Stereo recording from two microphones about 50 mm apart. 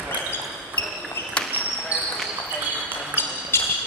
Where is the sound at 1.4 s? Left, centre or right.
Left.